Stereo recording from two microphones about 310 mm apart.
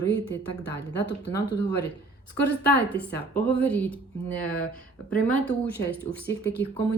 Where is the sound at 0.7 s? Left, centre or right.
Left.